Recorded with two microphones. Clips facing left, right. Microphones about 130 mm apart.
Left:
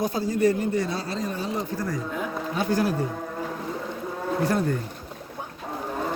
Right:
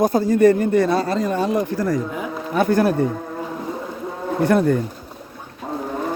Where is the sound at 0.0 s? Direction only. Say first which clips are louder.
Right 8 dB; 50° right (ahead or behind); by 2.0 s 90° right.